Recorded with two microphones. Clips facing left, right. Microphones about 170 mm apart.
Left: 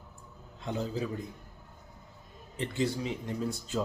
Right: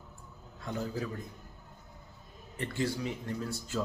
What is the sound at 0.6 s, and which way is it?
Speech, 20° left (ahead or behind).